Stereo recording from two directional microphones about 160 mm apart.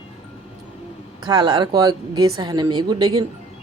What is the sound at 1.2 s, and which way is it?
Speech, 25° right (ahead or behind).